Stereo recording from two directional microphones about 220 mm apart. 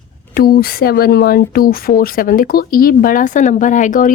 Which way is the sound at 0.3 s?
45° left (ahead or behind).